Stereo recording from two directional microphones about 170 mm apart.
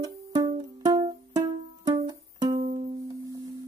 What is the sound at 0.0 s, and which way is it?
Music, 20° right (ahead or behind).